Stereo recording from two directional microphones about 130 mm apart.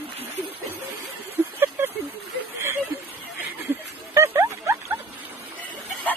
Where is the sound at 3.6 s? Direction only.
15° right (ahead or behind).